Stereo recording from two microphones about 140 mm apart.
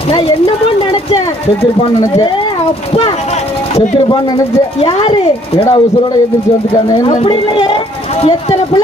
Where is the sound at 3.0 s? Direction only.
45° left (ahead or behind).